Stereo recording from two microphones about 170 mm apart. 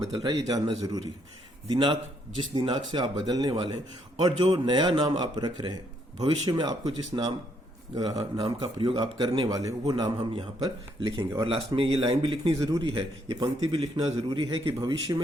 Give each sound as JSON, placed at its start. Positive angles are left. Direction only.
{"t": 0.0, "sound": "a man's voice", "side_deg": -25}